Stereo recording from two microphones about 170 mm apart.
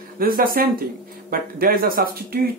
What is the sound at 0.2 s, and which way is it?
Speech, 60° right (ahead or behind).